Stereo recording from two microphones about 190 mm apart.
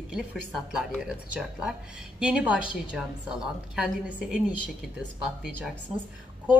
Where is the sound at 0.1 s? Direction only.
5° right (ahead or behind).